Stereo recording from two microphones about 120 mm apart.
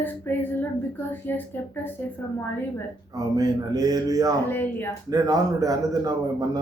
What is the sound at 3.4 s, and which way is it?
Speech, 35° right (ahead or behind).